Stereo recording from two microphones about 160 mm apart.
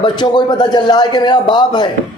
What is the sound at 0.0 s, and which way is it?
A man's voice, 25° left (ahead or behind).